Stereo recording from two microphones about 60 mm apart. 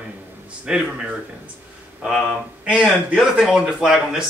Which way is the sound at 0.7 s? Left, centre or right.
Centre.